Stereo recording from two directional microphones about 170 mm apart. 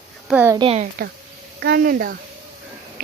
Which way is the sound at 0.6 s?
35° right (ahead or behind).